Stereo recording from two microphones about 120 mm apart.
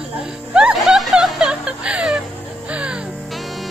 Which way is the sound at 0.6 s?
5° right (ahead or behind).